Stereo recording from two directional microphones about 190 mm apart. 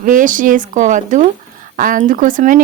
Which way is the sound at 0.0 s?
45° right (ahead or behind).